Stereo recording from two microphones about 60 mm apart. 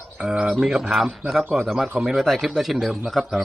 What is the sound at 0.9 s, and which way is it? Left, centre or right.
Speech, centre.